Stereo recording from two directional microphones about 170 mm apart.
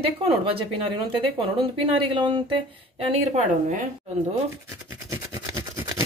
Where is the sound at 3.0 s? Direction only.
45° right (ahead or behind).